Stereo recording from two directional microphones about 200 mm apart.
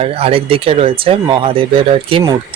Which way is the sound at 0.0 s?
30° right (ahead or behind).